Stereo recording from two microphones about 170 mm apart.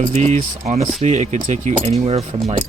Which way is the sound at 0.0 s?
40° right (ahead or behind).